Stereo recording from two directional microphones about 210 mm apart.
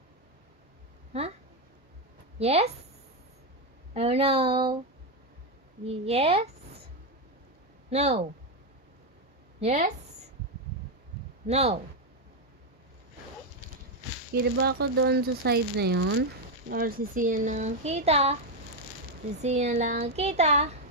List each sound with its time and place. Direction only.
2.3 s a woman's voice: 30° right (ahead or behind)
3.9 s speech: 30° right (ahead or behind)
6.0 s speech: 30° right (ahead or behind)
7.9 s speech: 30° right (ahead or behind)
9.6 s a woman's voice: 30° right (ahead or behind)
11.4 s speech: 30° right (ahead or behind)
14.4 s speech: 50° right (ahead or behind); by 20.8 s 30° right (ahead or behind)